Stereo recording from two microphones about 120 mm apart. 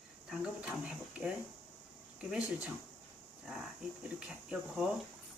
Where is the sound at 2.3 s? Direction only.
10° right (ahead or behind).